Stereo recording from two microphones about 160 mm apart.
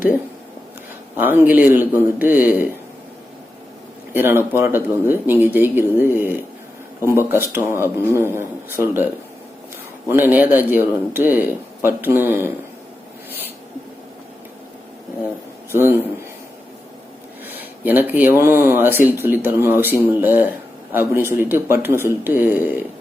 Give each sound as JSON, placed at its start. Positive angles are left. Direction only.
{"t": 1.1, "sound": "speech", "side_deg": -10}
{"t": 4.1, "sound": "speech", "side_deg": -15}
{"t": 10.1, "sound": "speech", "side_deg": -10}
{"t": 15.7, "sound": "speech", "side_deg": -15}
{"t": 17.4, "sound": "speech", "side_deg": -10}